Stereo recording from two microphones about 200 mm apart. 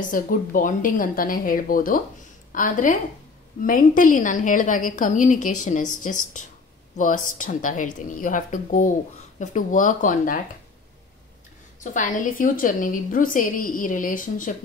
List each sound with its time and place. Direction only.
0.1 s a woman's voice: 45° left (ahead or behind)
11.8 s a woman's voice: 40° left (ahead or behind)